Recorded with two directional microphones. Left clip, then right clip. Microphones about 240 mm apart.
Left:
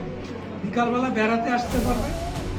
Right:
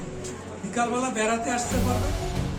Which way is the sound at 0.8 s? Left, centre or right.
Centre.